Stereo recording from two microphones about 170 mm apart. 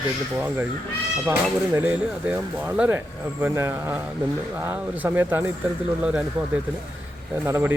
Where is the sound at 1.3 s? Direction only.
10° right (ahead or behind).